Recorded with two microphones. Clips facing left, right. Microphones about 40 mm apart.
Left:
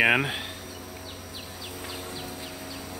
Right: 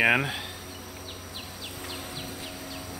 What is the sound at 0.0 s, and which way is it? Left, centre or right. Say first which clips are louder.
Speech: left 1 dB; centre.